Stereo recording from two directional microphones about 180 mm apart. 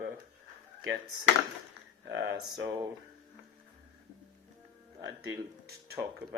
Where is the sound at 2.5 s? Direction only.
20° right (ahead or behind).